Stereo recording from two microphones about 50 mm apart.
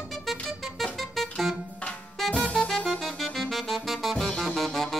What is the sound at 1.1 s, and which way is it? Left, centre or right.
Music, centre.